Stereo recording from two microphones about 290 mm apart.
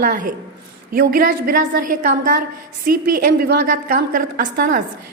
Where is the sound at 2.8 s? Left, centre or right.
Right.